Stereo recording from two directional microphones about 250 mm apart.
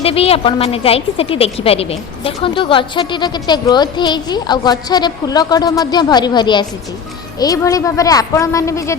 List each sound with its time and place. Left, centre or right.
0.0 s a woman's voice: left